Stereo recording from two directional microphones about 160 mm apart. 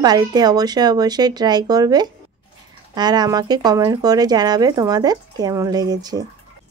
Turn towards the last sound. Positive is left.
turn(degrees=-25)  # may be behind; listen again after turning